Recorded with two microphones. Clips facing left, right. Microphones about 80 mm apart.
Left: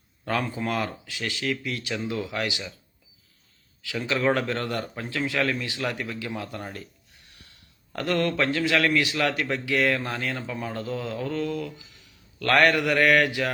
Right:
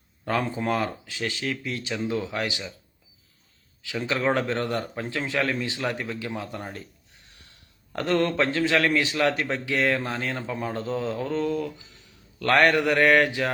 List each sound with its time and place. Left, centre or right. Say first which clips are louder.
0.3 s a man's voice: right 2 dB; right
4.0 s a man's voice: even; right
7.9 s a man's voice: right 2 dB; right
12.5 s a man's voice: right 1 dB; centre